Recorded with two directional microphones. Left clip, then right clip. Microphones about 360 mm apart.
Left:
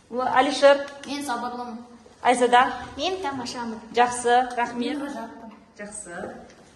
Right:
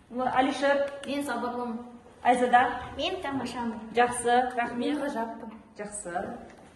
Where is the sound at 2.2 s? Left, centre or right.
Centre.